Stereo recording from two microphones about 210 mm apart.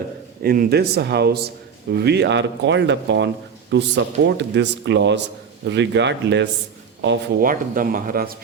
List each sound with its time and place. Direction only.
0.4 s a man's voice: 45° right (ahead or behind)